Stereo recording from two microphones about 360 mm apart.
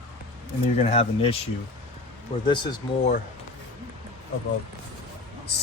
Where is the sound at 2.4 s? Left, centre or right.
Centre.